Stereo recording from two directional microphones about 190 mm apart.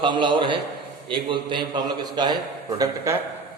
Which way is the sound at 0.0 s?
25° right (ahead or behind).